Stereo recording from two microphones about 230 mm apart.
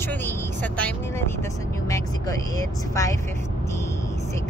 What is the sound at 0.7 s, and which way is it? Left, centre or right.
Speech, centre.